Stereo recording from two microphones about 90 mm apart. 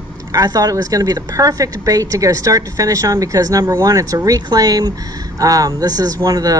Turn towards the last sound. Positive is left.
turn(degrees=-45)  # may be behind; listen again after turning